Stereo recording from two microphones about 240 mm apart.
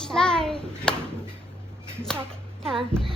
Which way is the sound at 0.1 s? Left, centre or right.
Centre.